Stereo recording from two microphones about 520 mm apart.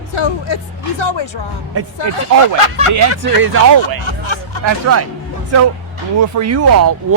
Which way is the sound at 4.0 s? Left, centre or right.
Left.